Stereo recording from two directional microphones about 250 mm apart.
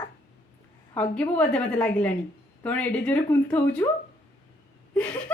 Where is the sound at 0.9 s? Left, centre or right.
Centre.